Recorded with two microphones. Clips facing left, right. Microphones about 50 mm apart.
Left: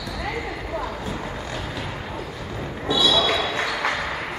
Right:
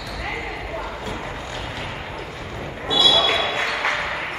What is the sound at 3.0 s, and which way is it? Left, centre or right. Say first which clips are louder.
Basketball bounce: right 2 dB; right.